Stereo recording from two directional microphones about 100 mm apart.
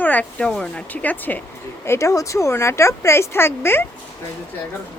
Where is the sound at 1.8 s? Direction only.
30° left (ahead or behind).